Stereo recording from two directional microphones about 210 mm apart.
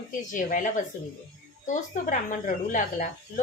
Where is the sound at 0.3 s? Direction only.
40° left (ahead or behind).